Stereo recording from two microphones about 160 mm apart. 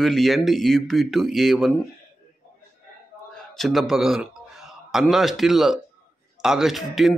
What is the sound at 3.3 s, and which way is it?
A man's voice, centre (ahead or behind).